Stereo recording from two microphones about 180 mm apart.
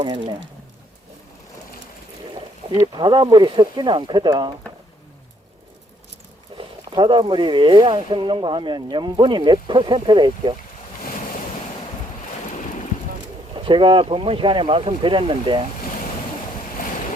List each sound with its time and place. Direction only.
0.0 s speech: 25° right (ahead or behind)
2.3 s speech: 25° right (ahead or behind)
6.6 s speech: 25° right (ahead or behind)
13.7 s speech: 25° right (ahead or behind)